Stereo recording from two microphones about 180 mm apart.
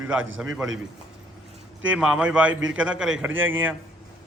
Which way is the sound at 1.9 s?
5° right (ahead or behind).